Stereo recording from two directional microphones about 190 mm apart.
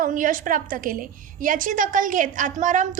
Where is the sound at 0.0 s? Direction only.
45° right (ahead or behind).